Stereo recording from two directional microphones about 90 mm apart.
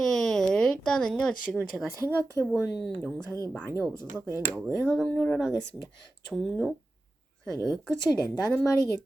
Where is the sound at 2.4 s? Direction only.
30° left (ahead or behind).